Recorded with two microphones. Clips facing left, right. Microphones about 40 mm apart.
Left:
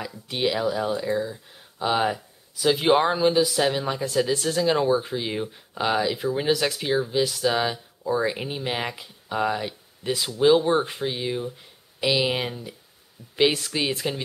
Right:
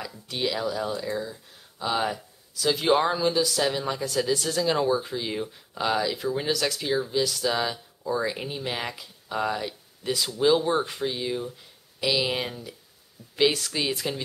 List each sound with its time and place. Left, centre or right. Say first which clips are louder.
0.3 s speech: left 4 dB; centre